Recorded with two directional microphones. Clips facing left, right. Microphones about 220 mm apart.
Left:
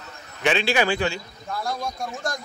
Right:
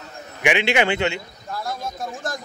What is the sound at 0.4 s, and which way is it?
Speech, 15° right (ahead or behind).